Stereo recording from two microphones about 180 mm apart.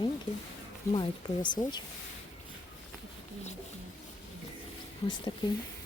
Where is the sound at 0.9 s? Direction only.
25° left (ahead or behind).